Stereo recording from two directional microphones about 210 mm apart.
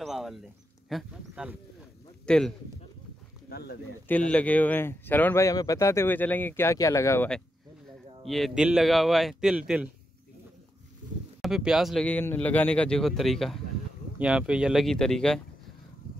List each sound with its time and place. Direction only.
0.0 s a sound: centre (ahead or behind)
0.8 s speech: centre (ahead or behind)
3.4 s a sound: 50° left (ahead or behind)
4.1 s speech: 5° left (ahead or behind)
8.3 s speech: centre (ahead or behind)
11.4 s speech: centre (ahead or behind)